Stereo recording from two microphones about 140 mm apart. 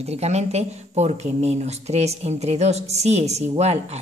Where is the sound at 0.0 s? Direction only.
50° right (ahead or behind).